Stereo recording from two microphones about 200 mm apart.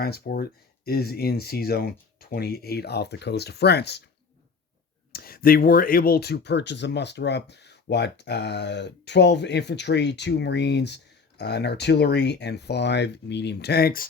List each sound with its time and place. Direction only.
0.0 s speech: 50° left (ahead or behind)
5.1 s speech: 50° left (ahead or behind)